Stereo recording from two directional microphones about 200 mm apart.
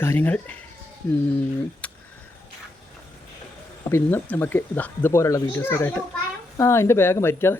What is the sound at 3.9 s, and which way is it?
Speech, 10° left (ahead or behind).